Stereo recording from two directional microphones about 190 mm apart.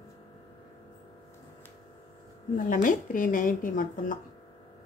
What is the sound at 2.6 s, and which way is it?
Speech, 45° left (ahead or behind).